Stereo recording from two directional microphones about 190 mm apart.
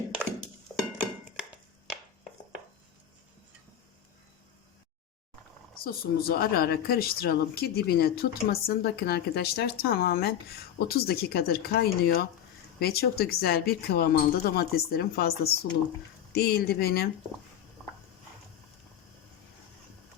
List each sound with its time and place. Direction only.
5.8 s a woman's voice: 55° left (ahead or behind)